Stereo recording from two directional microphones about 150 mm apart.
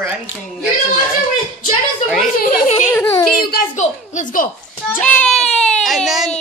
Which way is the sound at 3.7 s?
55° left (ahead or behind).